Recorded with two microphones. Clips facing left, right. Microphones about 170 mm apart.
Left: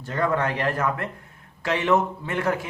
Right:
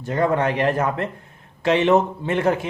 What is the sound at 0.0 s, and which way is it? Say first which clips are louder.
Speech: right 4 dB; 20° right (ahead or behind).